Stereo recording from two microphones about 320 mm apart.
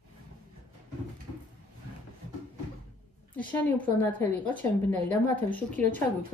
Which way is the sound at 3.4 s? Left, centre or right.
Centre.